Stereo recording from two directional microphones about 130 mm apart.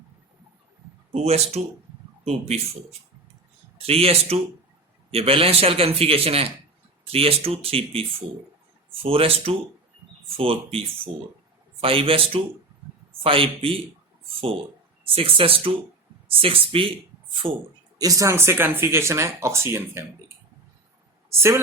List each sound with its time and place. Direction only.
1.1 s a man's voice: 55° right (ahead or behind)
3.8 s a man's voice: 50° right (ahead or behind)
15.1 s a man's voice: 45° right (ahead or behind)
17.9 s speech: 25° right (ahead or behind)